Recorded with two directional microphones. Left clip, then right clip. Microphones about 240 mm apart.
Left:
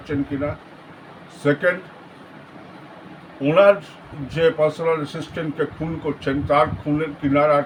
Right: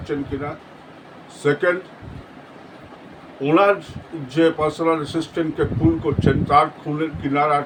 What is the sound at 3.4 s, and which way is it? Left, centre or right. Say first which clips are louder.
A man's voice: left 2 dB; centre.